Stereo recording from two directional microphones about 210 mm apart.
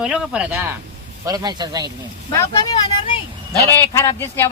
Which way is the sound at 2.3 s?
15° left (ahead or behind).